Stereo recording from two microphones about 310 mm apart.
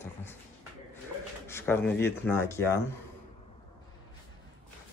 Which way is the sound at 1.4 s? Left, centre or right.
Centre.